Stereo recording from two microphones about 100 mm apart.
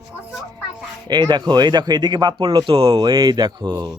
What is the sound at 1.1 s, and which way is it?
A woman's voice, 45° right (ahead or behind).